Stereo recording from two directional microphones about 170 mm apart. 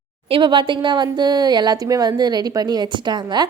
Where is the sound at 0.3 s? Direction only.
30° right (ahead or behind).